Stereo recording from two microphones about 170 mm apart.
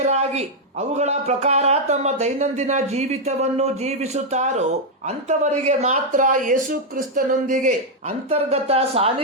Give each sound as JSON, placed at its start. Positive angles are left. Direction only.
{"t": 0.0, "sound": "speech", "side_deg": -40}